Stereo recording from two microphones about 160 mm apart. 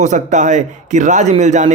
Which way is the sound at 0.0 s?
50° right (ahead or behind).